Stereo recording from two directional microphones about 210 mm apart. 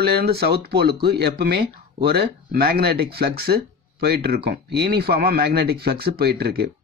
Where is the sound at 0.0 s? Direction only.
50° right (ahead or behind).